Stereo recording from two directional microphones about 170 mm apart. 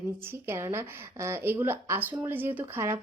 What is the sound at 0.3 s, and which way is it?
Speech, 15° right (ahead or behind).